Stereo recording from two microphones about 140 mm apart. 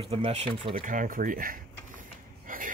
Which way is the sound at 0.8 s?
75° right (ahead or behind).